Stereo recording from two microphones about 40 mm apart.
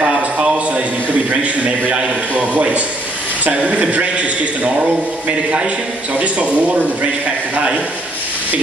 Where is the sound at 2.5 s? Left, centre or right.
Right.